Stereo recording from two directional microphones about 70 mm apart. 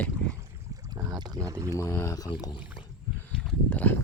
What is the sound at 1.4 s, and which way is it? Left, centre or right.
Speech, right.